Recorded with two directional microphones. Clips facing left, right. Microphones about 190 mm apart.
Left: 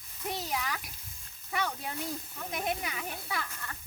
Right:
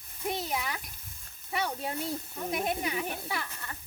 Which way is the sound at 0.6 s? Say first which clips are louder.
Right 1 dB; 10° right (ahead or behind).